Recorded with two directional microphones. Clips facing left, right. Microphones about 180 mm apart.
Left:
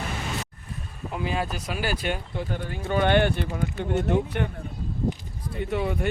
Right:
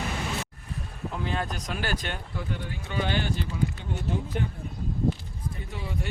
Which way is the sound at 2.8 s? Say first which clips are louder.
Left 9 dB; 55° left (ahead or behind).